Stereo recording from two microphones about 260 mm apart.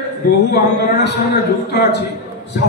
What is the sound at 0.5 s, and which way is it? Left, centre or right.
Speech, left.